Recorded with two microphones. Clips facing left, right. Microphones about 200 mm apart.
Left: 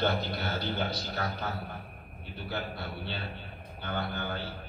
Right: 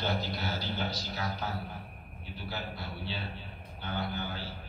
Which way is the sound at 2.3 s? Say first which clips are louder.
Left 3 dB; 60° left (ahead or behind).